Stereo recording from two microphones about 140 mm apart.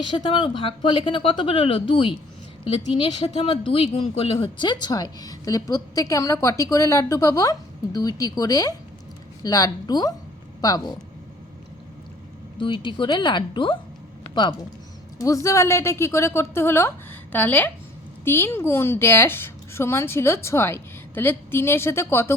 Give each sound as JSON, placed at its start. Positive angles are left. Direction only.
{"t": 0.0, "sound": "a woman's voice", "side_deg": 35}
{"t": 12.5, "sound": "speech", "side_deg": 35}
{"t": 15.2, "sound": "a woman's voice", "side_deg": 25}